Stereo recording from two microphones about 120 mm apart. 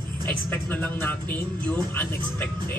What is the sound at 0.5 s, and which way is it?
Speech, 15° left (ahead or behind).